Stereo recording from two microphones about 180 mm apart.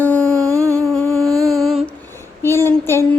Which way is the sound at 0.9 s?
5° left (ahead or behind).